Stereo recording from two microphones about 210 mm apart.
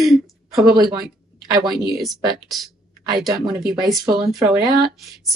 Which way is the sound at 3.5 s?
Centre (ahead or behind).